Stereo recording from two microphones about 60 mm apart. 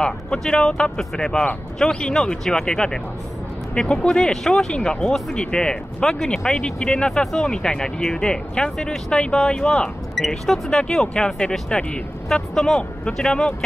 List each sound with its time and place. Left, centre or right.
0.0 s speech: centre